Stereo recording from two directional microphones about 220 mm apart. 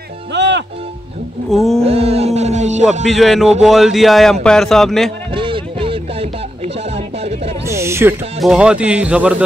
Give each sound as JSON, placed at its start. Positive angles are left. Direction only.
{"t": 0.3, "sound": "music", "side_deg": -50}
{"t": 1.5, "sound": "a man's voice", "side_deg": 0}
{"t": 1.8, "sound": "a sound", "side_deg": -25}
{"t": 3.1, "sound": "a man's voice", "side_deg": 0}
{"t": 5.3, "sound": "a sound", "side_deg": -25}
{"t": 7.6, "sound": "owl", "side_deg": -10}
{"t": 8.4, "sound": "a man's voice", "side_deg": -5}